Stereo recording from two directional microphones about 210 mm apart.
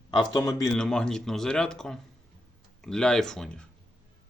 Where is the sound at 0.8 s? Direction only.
5° left (ahead or behind).